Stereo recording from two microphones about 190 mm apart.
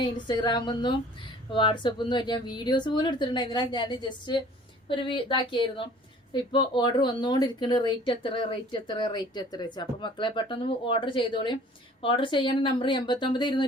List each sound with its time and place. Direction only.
0.0 s speech: 25° left (ahead or behind)